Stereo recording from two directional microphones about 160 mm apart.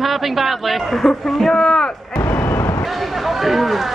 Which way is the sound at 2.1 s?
15° left (ahead or behind).